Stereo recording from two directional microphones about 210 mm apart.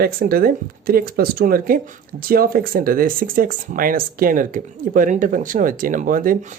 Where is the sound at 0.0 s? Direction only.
45° right (ahead or behind).